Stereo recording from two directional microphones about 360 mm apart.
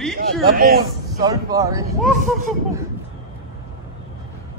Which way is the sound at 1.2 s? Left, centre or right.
Centre.